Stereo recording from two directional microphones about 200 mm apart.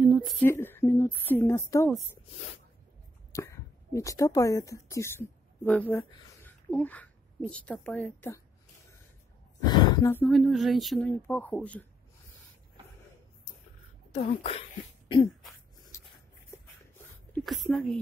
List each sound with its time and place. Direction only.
0.0 s a sound: 5° right (ahead or behind)
0.4 s a woman's voice: 10° left (ahead or behind)
3.3 s speech: 15° left (ahead or behind)
9.6 s gasp: 20° left (ahead or behind)
10.2 s speech: centre (ahead or behind)
14.1 s speech: 30° left (ahead or behind)
17.3 s speech: centre (ahead or behind)